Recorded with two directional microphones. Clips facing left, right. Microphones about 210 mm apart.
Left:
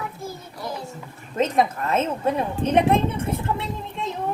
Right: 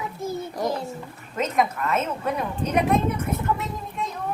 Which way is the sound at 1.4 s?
30° left (ahead or behind).